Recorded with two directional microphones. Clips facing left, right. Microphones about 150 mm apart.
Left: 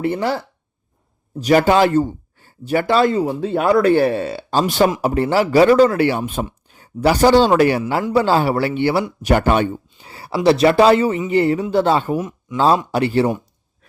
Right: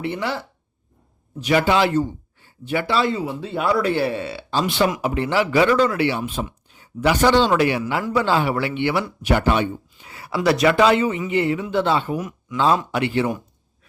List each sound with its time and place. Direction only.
0.0 s a man's voice: 40° left (ahead or behind)
9.2 s speech: 45° left (ahead or behind)
9.9 s a man's voice: 30° left (ahead or behind)
12.1 s speech: 25° left (ahead or behind)
12.5 s a man's voice: 35° left (ahead or behind)